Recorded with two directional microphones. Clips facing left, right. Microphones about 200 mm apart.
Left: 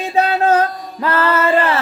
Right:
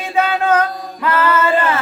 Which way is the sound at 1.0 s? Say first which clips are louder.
Even; 35° left (ahead or behind).